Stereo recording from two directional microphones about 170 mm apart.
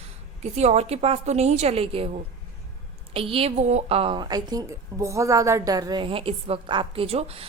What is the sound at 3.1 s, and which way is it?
A woman's voice, 35° right (ahead or behind).